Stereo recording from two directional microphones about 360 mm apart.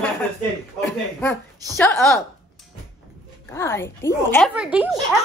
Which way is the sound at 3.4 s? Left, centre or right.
Centre.